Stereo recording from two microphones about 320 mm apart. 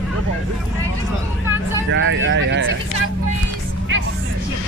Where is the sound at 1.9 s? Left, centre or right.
Right.